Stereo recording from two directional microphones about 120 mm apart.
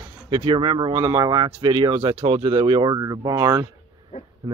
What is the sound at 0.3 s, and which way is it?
Speech, 45° right (ahead or behind).